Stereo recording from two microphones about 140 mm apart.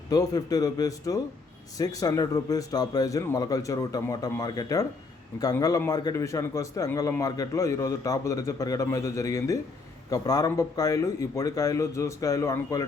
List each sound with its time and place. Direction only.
0.1 s a man's voice: 25° left (ahead or behind)